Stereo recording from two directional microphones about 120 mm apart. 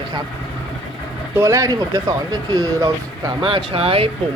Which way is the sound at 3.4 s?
50° right (ahead or behind).